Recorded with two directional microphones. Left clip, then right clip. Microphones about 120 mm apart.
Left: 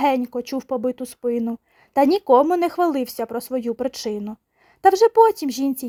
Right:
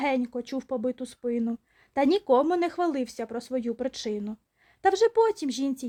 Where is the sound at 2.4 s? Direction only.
45° left (ahead or behind).